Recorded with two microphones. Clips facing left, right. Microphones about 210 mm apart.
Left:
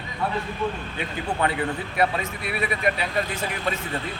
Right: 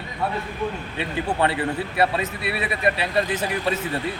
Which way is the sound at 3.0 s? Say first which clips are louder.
Right 4 dB; 30° right (ahead or behind).